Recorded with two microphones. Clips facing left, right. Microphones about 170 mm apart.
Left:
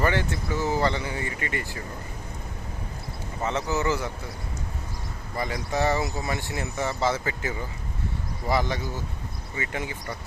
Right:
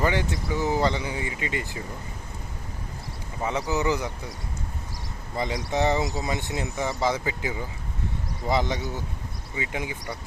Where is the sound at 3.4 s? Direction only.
10° right (ahead or behind).